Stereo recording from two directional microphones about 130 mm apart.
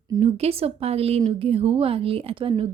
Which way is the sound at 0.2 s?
50° right (ahead or behind).